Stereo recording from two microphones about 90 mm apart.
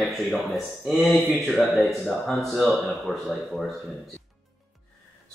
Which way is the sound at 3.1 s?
15° right (ahead or behind).